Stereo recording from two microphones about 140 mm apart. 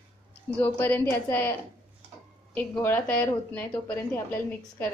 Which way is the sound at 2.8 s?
15° left (ahead or behind).